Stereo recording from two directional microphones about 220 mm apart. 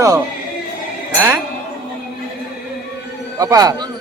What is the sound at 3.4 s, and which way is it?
Speech, 15° right (ahead or behind).